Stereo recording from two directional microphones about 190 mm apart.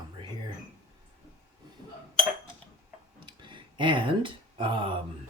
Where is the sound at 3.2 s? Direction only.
25° right (ahead or behind).